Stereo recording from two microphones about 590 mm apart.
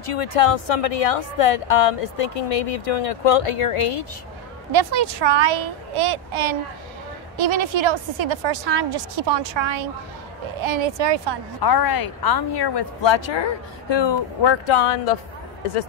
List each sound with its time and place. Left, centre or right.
0.0 s a woman's voice: left
4.7 s a woman's voice: right
11.6 s speech: left